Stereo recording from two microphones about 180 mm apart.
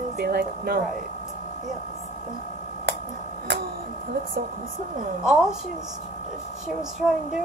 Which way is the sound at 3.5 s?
70° right (ahead or behind).